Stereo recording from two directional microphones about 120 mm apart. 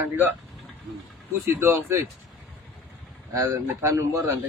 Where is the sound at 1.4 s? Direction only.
20° right (ahead or behind).